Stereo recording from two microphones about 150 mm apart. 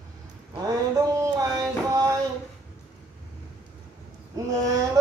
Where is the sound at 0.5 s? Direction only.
25° right (ahead or behind).